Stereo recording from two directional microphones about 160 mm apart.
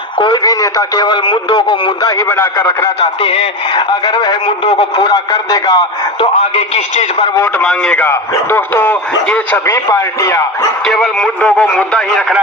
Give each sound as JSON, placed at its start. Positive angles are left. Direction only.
{"t": 0.2, "sound": "speech", "side_deg": 25}
{"t": 2.2, "sound": "a man's voice", "side_deg": 10}
{"t": 3.0, "sound": "speech", "side_deg": 35}
{"t": 6.1, "sound": "speech", "side_deg": 40}
{"t": 7.4, "sound": "a man's voice", "side_deg": 5}
{"t": 10.8, "sound": "speech", "side_deg": 0}